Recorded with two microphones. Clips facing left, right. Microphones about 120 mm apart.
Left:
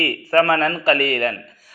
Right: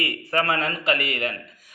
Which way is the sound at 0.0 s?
40° left (ahead or behind).